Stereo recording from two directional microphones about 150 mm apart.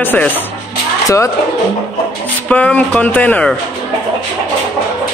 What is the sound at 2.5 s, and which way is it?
Speech, 10° left (ahead or behind).